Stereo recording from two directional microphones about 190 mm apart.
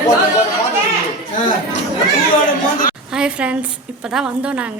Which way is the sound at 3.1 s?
5° right (ahead or behind).